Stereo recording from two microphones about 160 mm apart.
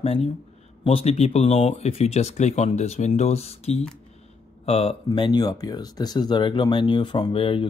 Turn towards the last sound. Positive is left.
turn(degrees=35)  # may be behind; listen again after turning